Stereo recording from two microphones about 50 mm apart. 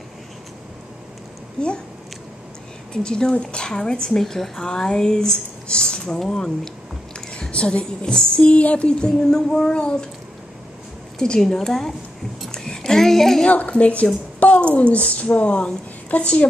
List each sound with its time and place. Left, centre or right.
2.9 s speech: centre
7.2 s a sound: centre
7.5 s a woman's voice: left
8.5 s speech: left
11.1 s speech: centre
12.4 s a sound: centre
13.5 s a woman's voice: left